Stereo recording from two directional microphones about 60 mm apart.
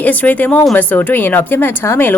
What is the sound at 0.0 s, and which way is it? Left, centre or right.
Speech, left.